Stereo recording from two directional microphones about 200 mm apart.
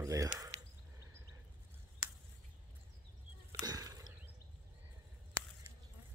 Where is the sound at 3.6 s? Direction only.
20° right (ahead or behind).